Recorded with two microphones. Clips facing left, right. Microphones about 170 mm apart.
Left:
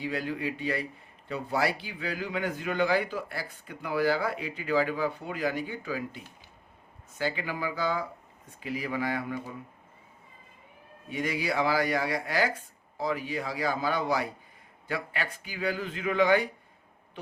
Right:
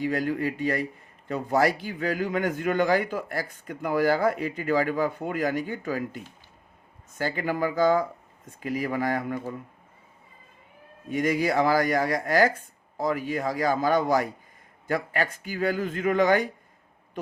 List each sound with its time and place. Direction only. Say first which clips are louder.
0.0 s a man's voice: right 6 dB; 45° right (ahead or behind)
7.2 s a man's voice: right 5 dB; 45° right (ahead or behind)
11.1 s a man's voice: right 6 dB; 45° right (ahead or behind)